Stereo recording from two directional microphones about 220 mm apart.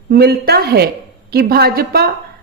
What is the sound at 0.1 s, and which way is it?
Speech, 45° right (ahead or behind).